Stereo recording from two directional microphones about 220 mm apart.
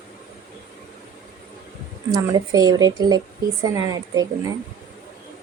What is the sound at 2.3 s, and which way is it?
Speech, 15° right (ahead or behind).